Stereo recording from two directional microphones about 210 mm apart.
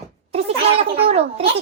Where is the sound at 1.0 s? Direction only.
30° right (ahead or behind).